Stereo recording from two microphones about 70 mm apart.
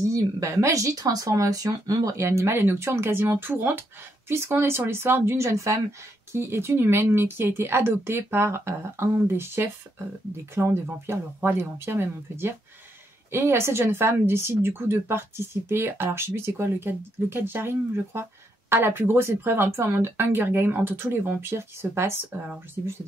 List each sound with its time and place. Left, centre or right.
0.0 s a woman's voice: right
2.2 s speech: right